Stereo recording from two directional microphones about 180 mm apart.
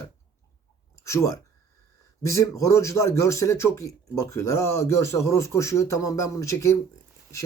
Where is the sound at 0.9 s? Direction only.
15° left (ahead or behind).